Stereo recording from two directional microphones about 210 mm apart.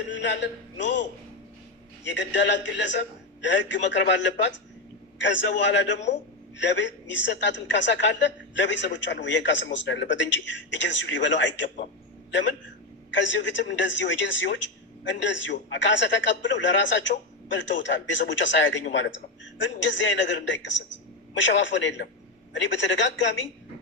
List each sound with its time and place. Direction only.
0.1 s a man's voice: 60° left (ahead or behind)
2.0 s a man's voice: 60° left (ahead or behind)
13.1 s a man's voice: 60° left (ahead or behind)